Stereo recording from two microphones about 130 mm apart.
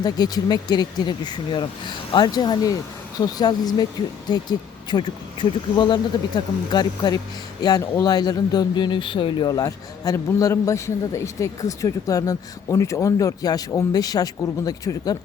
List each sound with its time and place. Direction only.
0.0 s speech: 30° left (ahead or behind)
9.5 s a man's voice: 25° left (ahead or behind)